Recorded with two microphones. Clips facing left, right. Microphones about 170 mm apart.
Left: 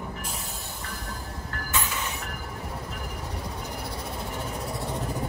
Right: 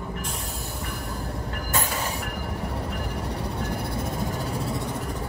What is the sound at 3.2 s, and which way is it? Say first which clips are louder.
Train: right 5 dB; 65° right (ahead or behind).